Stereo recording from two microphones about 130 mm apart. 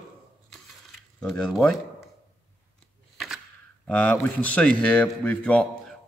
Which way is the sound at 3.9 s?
10° left (ahead or behind).